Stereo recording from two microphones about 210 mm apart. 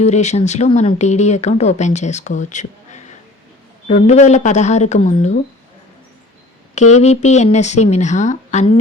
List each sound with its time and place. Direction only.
0.0 s speech: 35° left (ahead or behind)
7.0 s speech: 30° left (ahead or behind)